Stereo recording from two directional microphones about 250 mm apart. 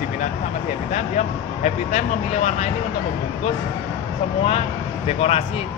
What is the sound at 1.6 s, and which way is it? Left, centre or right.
Speech, left.